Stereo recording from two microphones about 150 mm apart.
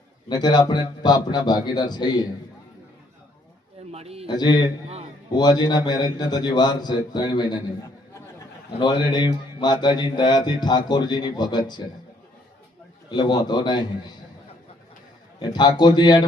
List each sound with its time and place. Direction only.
0.3 s mantra: 30° left (ahead or behind)
3.9 s a man's voice: 40° right (ahead or behind)
4.3 s mantra: 30° left (ahead or behind)
8.8 s mantra: 30° left (ahead or behind)
13.1 s mantra: 30° left (ahead or behind)
15.4 s mantra: 30° left (ahead or behind)